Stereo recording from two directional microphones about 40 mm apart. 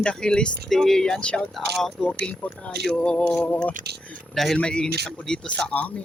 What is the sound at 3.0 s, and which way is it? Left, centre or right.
Speech, left.